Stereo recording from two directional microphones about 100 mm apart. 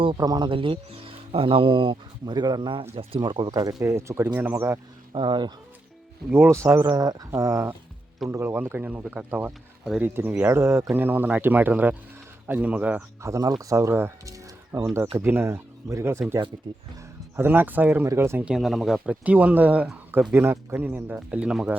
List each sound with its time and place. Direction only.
0.2 s speech: 40° right (ahead or behind)
0.4 s speech: 60° right (ahead or behind)
2.9 s speech: 65° right (ahead or behind)
3.2 s speech: 50° right (ahead or behind); by 4.8 s 20° right (ahead or behind)
5.1 s speech: 50° right (ahead or behind)
6.3 s speech: 25° right (ahead or behind)
6.8 s speech: 40° right (ahead or behind); by 13.0 s 15° right (ahead or behind)
13.2 s speech: 35° right (ahead or behind)
17.3 s speech: 20° right (ahead or behind)
18.4 s speech: 5° right (ahead or behind)
19.2 s speech: 15° right (ahead or behind)